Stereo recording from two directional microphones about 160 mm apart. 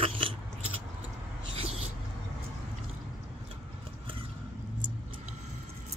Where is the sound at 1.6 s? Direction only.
35° right (ahead or behind).